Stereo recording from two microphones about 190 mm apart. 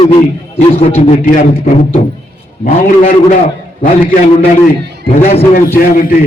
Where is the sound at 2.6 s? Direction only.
45° left (ahead or behind).